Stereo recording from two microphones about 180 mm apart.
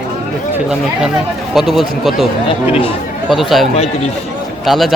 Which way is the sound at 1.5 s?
Centre (ahead or behind).